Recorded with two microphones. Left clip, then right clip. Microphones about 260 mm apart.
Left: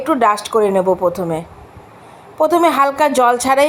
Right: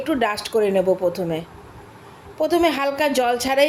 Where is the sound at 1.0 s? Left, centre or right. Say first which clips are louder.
Left 5 dB; left.